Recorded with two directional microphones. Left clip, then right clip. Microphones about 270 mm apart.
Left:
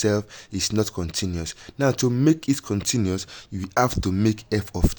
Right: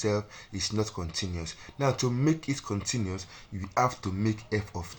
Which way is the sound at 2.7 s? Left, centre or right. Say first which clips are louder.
Left 8 dB; left.